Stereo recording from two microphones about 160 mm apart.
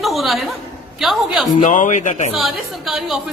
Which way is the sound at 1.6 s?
50° left (ahead or behind).